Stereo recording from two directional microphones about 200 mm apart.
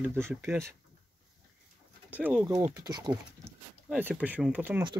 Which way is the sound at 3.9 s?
10° right (ahead or behind).